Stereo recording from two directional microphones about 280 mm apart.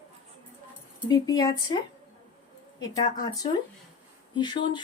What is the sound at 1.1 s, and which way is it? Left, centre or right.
Speech, centre.